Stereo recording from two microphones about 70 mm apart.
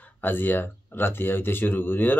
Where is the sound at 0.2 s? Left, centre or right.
Left.